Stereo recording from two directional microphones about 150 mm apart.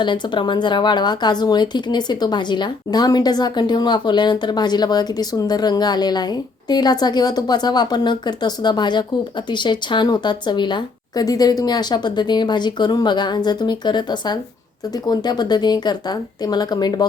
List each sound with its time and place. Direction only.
0.0 s speech: 30° left (ahead or behind)